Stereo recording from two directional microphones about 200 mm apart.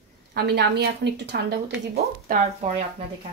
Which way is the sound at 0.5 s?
55° right (ahead or behind).